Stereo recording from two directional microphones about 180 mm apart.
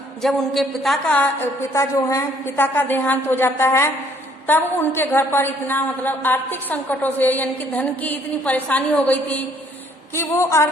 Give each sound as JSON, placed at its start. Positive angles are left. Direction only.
{"t": 0.2, "sound": "a woman's voice", "side_deg": 0}